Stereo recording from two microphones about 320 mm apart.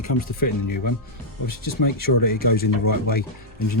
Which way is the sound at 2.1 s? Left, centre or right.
Left.